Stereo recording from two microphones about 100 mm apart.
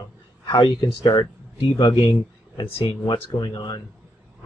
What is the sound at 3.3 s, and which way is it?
Speech, 50° left (ahead or behind).